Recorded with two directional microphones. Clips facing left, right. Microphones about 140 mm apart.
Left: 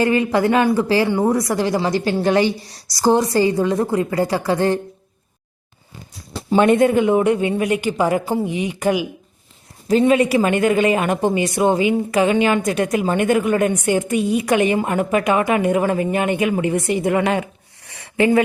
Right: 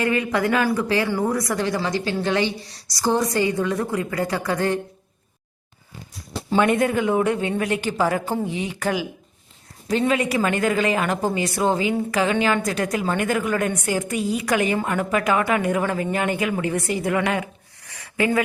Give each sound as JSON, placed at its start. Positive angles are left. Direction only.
{"t": 0.0, "sound": "a woman's voice", "side_deg": 30}
{"t": 6.6, "sound": "a man's voice", "side_deg": 25}